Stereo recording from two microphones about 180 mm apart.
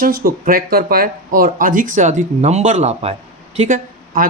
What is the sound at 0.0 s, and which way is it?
Speech, 55° right (ahead or behind).